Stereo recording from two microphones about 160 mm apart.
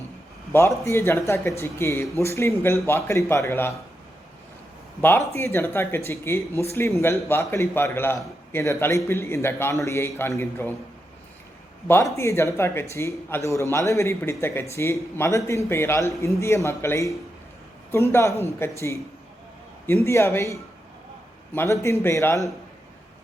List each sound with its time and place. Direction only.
0.5 s speech: 15° left (ahead or behind)
4.9 s speech: 15° left (ahead or behind)
11.9 s speech: 15° left (ahead or behind)
20.1 s speech: 15° left (ahead or behind)